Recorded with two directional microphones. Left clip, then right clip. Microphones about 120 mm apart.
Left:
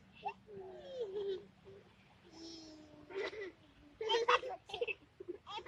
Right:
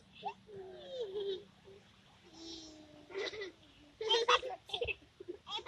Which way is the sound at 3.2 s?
5° left (ahead or behind).